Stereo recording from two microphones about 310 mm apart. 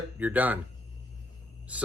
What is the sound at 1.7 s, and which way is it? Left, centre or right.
Speech, centre.